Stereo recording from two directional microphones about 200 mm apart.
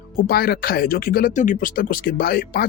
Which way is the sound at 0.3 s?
50° left (ahead or behind).